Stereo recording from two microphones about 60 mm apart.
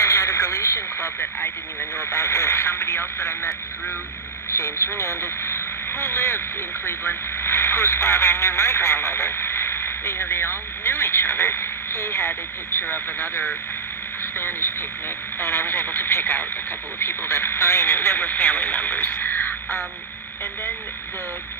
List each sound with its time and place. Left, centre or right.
0.0 s speech: left
2.0 s speech: left
4.5 s speech: left
12.8 s speech: left